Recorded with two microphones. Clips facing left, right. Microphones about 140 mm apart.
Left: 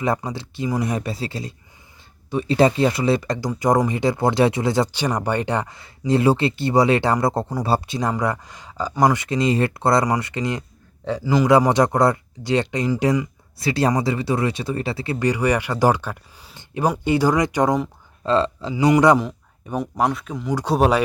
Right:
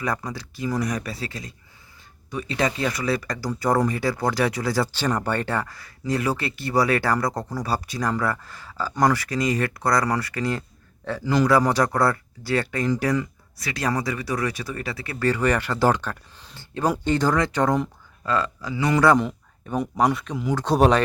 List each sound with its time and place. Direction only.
0.0 s a man's voice: 25° left (ahead or behind); by 11.4 s 10° left (ahead or behind)
11.4 s speech: 20° left (ahead or behind)
18.2 s speech: 25° left (ahead or behind)
19.1 s speech: 5° left (ahead or behind)